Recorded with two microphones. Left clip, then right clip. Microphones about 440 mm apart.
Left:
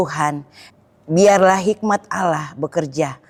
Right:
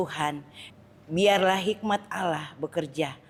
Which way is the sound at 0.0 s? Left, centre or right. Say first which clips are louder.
Left 9 dB; left.